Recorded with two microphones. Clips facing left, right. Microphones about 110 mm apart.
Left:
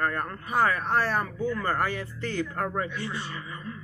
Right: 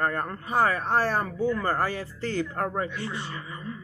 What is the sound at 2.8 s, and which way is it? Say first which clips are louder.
Speech: right 1 dB; 25° right (ahead or behind).